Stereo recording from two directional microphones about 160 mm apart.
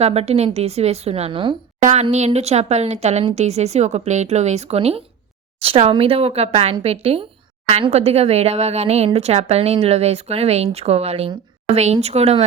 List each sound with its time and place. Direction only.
0.0 s a woman's voice: 40° right (ahead or behind)
1.8 s a woman's voice: 40° right (ahead or behind)